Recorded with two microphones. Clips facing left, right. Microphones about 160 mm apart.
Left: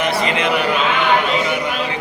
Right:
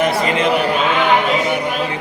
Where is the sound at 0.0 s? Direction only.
40° right (ahead or behind).